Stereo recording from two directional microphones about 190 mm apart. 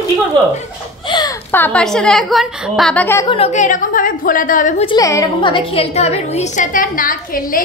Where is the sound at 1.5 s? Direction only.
10° left (ahead or behind).